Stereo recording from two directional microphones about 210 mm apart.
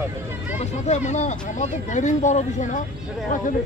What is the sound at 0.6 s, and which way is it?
Speech, 35° left (ahead or behind).